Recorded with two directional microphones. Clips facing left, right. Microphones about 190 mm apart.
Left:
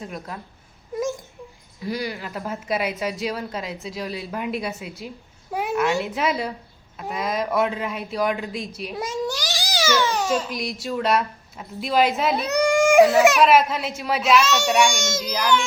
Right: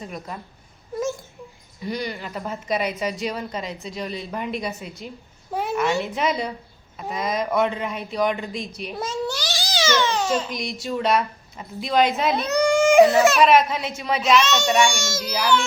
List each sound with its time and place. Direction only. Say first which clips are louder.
0.0 s a woman's voice: even; centre (ahead or behind)
1.8 s a woman's voice: left 1 dB; 5° left (ahead or behind)
9.2 s babbling: even; 15° left (ahead or behind)
9.8 s a sound: even; 15° left (ahead or behind)
10.2 s a woman's voice: even; centre (ahead or behind)
12.5 s a sound: right 1 dB; 15° left (ahead or behind)
13.0 s a woman's voice: even; centre (ahead or behind)
14.8 s a child's voice: left 1 dB; 20° left (ahead or behind)
15.2 s a woman's voice: even; centre (ahead or behind)